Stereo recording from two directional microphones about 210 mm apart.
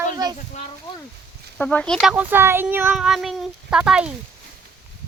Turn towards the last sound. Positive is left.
turn(degrees=-5)  # may be behind; listen again after turning